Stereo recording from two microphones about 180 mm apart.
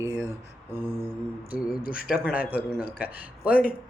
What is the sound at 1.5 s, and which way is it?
Speech, 55° left (ahead or behind).